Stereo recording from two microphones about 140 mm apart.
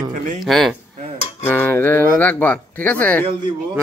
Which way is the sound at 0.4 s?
Centre (ahead or behind).